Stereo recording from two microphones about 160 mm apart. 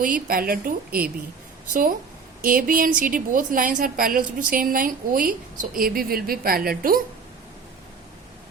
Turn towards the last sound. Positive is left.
turn(degrees=-65)  # may be behind; listen again after turning